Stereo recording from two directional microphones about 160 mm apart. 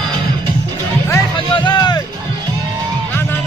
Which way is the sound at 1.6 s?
25° left (ahead or behind).